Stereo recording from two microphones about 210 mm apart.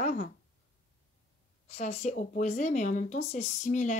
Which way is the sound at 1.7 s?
30° left (ahead or behind).